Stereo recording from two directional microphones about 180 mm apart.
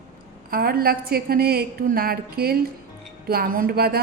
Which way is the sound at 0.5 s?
55° right (ahead or behind).